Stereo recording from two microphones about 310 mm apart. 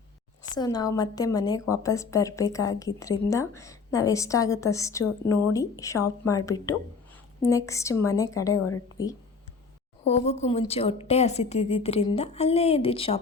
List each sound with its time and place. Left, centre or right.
0.5 s a woman's voice: centre
8.5 s a woman's voice: left
10.1 s a woman's voice: left